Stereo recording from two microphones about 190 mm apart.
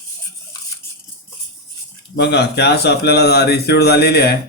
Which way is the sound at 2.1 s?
60° left (ahead or behind).